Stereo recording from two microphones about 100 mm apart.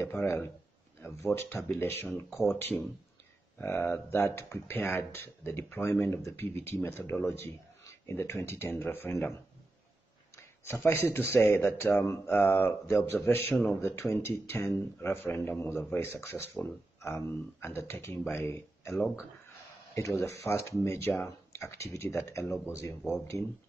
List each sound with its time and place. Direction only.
0.0 s speech: 25° left (ahead or behind)
10.3 s a sound: 25° left (ahead or behind)
11.1 s speech: 25° left (ahead or behind)
20.2 s speech: 30° left (ahead or behind)